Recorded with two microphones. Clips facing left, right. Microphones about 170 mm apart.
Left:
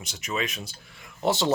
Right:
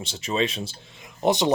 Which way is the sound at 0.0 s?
30° right (ahead or behind).